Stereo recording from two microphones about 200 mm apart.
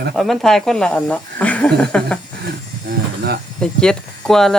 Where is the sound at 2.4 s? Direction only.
55° right (ahead or behind).